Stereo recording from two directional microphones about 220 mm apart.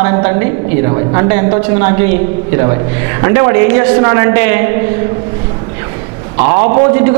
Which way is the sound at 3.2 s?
20° right (ahead or behind).